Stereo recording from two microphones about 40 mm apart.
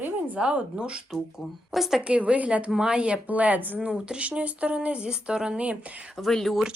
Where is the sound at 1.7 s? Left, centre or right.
Centre.